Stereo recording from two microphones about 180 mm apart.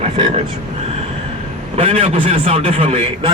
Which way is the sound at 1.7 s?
30° right (ahead or behind).